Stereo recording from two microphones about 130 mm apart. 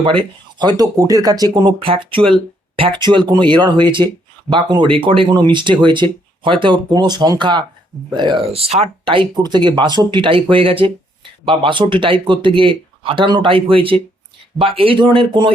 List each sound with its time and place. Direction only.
0.0 s speech: 40° right (ahead or behind)